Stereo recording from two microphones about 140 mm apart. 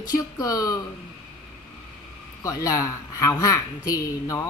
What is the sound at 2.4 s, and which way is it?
A woman's voice, 25° left (ahead or behind).